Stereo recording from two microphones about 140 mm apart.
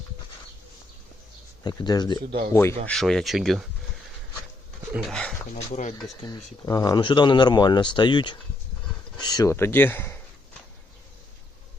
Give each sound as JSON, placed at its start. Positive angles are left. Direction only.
{"t": 1.6, "sound": "speech", "side_deg": 30}
{"t": 2.8, "sound": "speech", "side_deg": 5}
{"t": 4.9, "sound": "speech", "side_deg": 0}
{"t": 5.5, "sound": "speech", "side_deg": 55}
{"t": 6.2, "sound": "speech", "side_deg": 25}